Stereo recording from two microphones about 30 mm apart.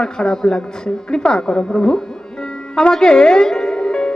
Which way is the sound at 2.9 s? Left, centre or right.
Left.